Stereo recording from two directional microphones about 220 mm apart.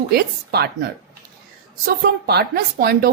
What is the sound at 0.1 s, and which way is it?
Speech, 45° right (ahead or behind).